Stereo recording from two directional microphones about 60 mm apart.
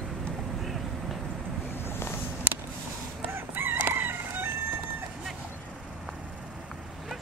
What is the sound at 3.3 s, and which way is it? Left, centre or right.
Crowing, right.